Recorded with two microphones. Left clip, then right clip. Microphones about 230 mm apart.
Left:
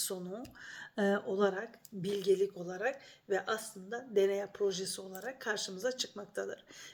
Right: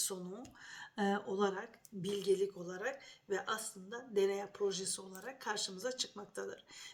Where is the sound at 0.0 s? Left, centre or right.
Centre.